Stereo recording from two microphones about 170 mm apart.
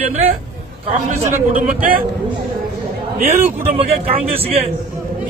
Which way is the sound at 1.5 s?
55° right (ahead or behind).